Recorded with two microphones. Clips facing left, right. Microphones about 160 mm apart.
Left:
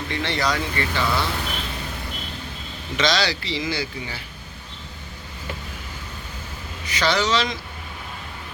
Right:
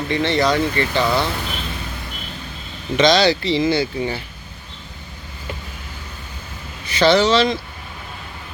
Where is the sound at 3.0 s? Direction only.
20° right (ahead or behind).